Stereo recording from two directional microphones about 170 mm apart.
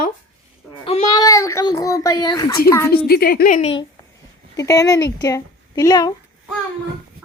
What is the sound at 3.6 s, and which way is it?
Speech, 30° left (ahead or behind).